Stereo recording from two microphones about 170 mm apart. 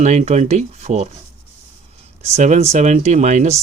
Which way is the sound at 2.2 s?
40° right (ahead or behind).